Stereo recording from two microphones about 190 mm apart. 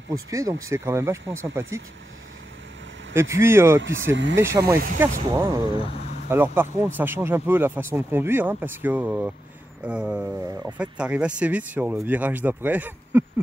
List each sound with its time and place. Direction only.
0.1 s speech: 15° right (ahead or behind)
3.2 s speech: 15° right (ahead or behind)
3.8 s speech: 75° right (ahead or behind)
4.4 s speech: 15° right (ahead or behind)